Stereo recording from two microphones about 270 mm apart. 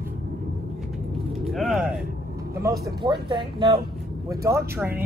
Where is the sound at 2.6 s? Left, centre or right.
Centre.